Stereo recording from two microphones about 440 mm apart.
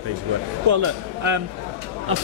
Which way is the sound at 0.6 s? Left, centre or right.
Right.